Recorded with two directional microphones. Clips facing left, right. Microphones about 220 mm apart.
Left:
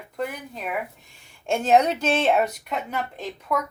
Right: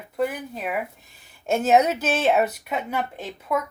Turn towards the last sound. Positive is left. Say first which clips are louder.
# right 1 dB
turn(degrees=-5)  # may be behind; listen again after turning